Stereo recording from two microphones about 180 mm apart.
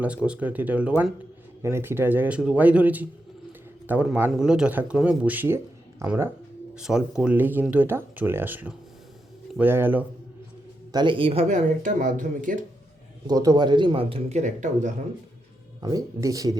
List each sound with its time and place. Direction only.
0.3 s speech: 10° right (ahead or behind)
6.7 s speech: 5° right (ahead or behind)
10.9 s speech: 25° right (ahead or behind); by 12.6 s 45° right (ahead or behind)
13.2 s speech: 20° right (ahead or behind); by 14.9 s 40° right (ahead or behind)
15.8 s speech: 20° right (ahead or behind)